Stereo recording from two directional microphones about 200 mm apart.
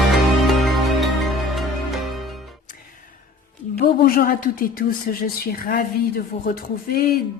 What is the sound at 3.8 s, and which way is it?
A woman's voice, 50° left (ahead or behind).